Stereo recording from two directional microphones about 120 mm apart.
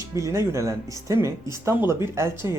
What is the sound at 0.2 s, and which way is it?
Speech, 25° right (ahead or behind).